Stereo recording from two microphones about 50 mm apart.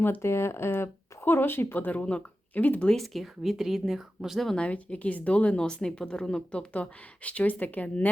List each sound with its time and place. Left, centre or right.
0.2 s speech: left
1.2 s speech: left
3.0 s speech: centre
4.5 s a woman's voice: left